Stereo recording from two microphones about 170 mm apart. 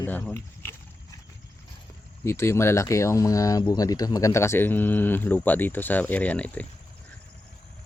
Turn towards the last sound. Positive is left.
turn(degrees=10)  # may be behind; listen again after turning